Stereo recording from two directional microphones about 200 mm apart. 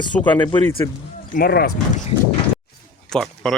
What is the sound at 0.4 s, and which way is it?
Speech, 25° left (ahead or behind).